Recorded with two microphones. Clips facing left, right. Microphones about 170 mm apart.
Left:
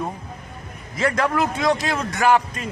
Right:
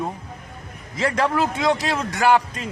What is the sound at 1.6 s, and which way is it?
Speech, 15° right (ahead or behind).